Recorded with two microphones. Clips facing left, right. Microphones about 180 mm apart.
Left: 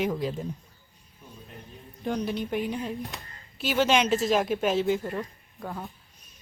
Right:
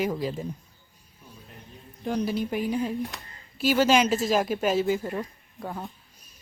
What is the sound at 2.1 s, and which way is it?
Speech, 5° right (ahead or behind).